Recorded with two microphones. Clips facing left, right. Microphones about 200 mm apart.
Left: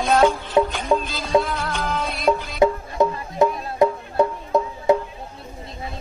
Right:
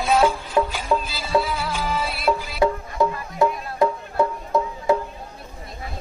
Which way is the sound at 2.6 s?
20° left (ahead or behind).